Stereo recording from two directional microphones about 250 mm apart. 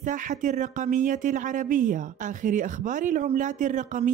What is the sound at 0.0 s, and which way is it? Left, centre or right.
Speech, right.